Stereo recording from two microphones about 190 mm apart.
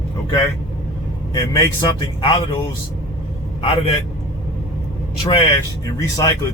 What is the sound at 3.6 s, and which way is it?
Speech, 30° left (ahead or behind).